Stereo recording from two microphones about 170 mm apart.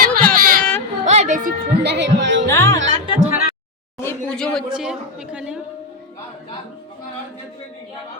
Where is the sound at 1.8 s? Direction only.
85° right.